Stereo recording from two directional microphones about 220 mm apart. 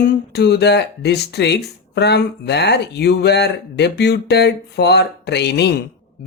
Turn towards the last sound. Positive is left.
turn(degrees=50)  # may be behind; listen again after turning